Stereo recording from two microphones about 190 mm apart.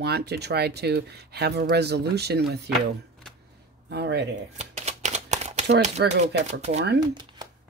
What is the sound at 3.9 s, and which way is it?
Speech, 60° right (ahead or behind).